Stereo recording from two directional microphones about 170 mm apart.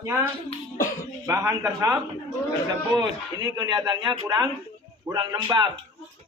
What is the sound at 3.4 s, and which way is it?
A man's voice, 25° right (ahead or behind).